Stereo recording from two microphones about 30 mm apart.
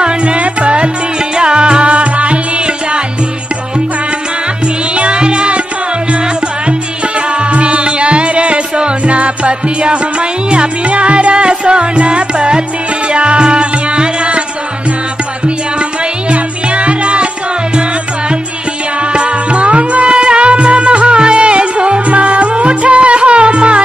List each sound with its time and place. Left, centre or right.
0.0 s music: right
1.3 s music: right
1.9 s music: right
4.9 s music: right
7.2 s music: right
15.4 s music: right
18.9 s music: right